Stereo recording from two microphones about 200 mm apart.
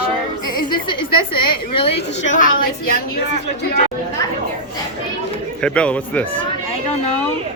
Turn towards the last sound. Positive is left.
turn(degrees=5)  # may be behind; listen again after turning